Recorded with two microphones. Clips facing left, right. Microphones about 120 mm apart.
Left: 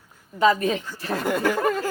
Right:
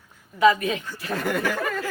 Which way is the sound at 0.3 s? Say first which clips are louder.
Right 1 dB; 35° left (ahead or behind).